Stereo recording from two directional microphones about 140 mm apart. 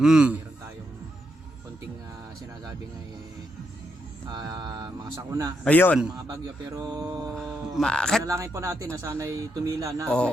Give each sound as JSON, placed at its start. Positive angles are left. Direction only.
{"t": 0.0, "sound": "a man's voice", "side_deg": -5}
{"t": 4.3, "sound": "speech", "side_deg": -30}
{"t": 5.6, "sound": "speech", "side_deg": 10}
{"t": 6.1, "sound": "speech", "side_deg": -25}
{"t": 7.8, "sound": "a man's voice", "side_deg": 5}
{"t": 8.2, "sound": "speech", "side_deg": -20}